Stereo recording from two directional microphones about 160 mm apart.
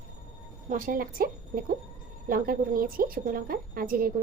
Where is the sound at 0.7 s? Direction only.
60° right (ahead or behind).